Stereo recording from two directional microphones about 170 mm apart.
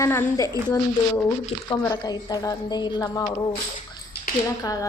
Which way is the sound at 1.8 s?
20° left (ahead or behind).